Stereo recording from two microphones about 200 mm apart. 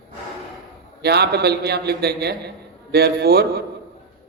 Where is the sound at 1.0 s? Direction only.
55° right (ahead or behind).